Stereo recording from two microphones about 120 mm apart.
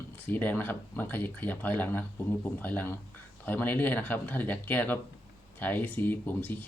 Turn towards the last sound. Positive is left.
turn(degrees=15)  # may be behind; listen again after turning